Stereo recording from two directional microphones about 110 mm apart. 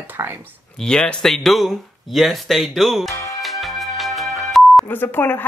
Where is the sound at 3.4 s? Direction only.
Centre (ahead or behind).